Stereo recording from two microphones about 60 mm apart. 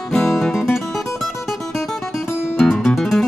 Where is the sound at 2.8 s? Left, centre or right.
Centre.